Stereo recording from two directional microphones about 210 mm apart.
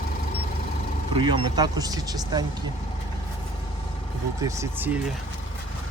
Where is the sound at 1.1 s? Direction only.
25° right (ahead or behind).